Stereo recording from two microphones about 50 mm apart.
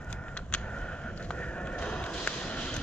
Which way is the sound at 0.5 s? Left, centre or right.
Left.